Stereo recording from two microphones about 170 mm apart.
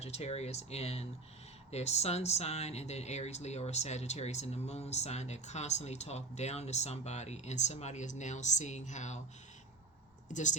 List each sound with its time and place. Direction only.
0.0 s speech: 40° left (ahead or behind)
10.2 s speech: 45° left (ahead or behind)